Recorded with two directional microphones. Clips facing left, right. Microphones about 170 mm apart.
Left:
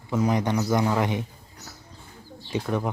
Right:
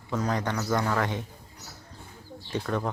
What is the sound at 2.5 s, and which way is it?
Speech, 10° left (ahead or behind).